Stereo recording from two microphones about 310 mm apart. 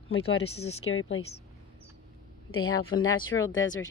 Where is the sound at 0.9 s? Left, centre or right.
Left.